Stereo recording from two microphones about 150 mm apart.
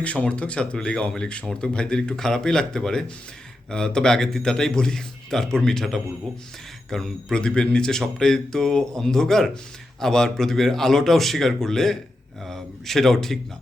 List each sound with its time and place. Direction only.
0.0 s speech: 10° left (ahead or behind)